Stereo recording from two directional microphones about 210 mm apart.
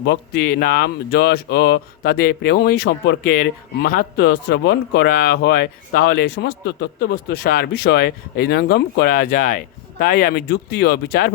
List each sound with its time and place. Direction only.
0.0 s speech: 50° left (ahead or behind)